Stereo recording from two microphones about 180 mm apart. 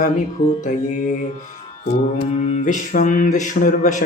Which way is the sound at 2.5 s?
45° left (ahead or behind).